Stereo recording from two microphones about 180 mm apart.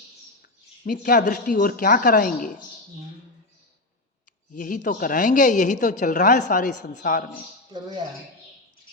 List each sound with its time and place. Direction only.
0.9 s speech: 50° left (ahead or behind)
4.5 s speech: 50° left (ahead or behind)
7.7 s speech: 20° right (ahead or behind)